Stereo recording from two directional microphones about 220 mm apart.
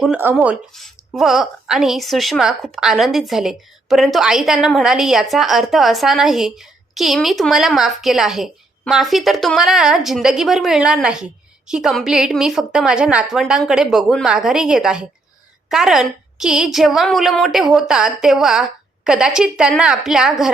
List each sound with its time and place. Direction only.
0.0 s a woman's voice: 5° right (ahead or behind)